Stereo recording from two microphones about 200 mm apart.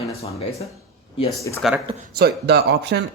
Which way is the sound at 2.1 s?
55° right (ahead or behind).